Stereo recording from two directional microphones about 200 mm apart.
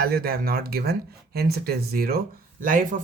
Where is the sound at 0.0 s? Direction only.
50° right (ahead or behind).